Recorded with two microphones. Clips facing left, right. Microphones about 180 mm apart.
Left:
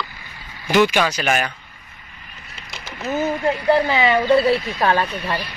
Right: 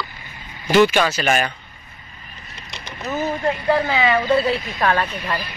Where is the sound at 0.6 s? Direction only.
15° left (ahead or behind).